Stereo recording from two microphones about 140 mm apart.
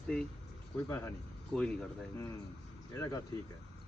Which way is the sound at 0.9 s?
20° left (ahead or behind).